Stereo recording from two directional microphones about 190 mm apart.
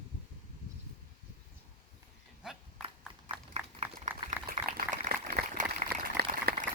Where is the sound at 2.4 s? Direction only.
5° right (ahead or behind).